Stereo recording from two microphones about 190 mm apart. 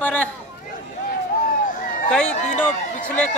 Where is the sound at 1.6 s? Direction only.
45° left (ahead or behind).